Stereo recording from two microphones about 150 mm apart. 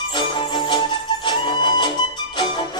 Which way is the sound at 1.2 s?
30° left (ahead or behind).